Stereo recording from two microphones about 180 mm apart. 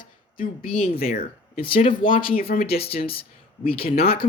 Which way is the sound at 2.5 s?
35° left (ahead or behind).